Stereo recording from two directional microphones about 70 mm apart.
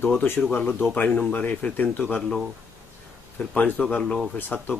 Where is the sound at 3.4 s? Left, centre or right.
Centre.